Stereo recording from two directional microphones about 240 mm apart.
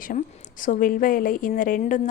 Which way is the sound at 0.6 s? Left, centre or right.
Left.